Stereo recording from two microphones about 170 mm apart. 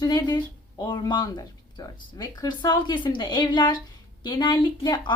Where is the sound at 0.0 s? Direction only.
25° left (ahead or behind).